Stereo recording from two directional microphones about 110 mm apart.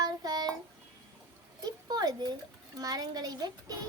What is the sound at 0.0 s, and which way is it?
Child singing, 35° right (ahead or behind).